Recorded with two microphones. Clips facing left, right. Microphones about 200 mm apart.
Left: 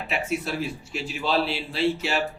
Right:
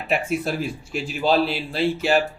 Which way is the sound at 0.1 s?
50° right (ahead or behind).